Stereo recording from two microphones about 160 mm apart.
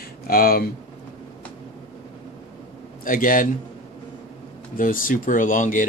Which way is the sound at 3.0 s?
60° left (ahead or behind).